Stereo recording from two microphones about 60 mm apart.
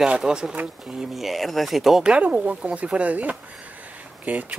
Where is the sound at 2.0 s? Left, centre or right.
Centre.